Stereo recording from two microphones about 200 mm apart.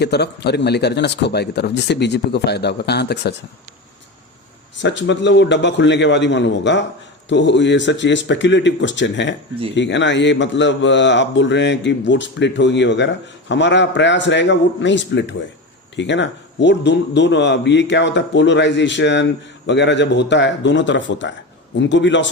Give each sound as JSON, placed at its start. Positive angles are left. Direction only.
{"t": 0.0, "sound": "a man's voice", "side_deg": 55}
{"t": 4.8, "sound": "a man's voice", "side_deg": 60}